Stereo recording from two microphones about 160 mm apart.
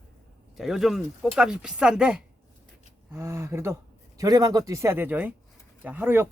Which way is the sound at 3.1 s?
15° right (ahead or behind).